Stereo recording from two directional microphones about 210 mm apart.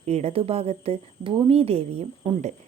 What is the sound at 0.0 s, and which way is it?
A woman's voice, 30° right (ahead or behind).